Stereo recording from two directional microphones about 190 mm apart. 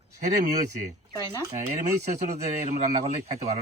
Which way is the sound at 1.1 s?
20° right (ahead or behind).